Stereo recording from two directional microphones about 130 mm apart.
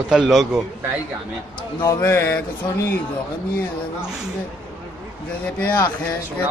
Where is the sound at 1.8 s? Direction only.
25° left (ahead or behind).